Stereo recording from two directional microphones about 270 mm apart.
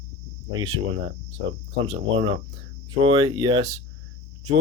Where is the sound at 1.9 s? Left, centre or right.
Centre.